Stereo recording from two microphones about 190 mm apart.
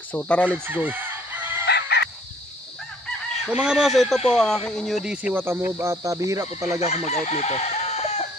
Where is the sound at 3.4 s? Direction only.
5° right (ahead or behind).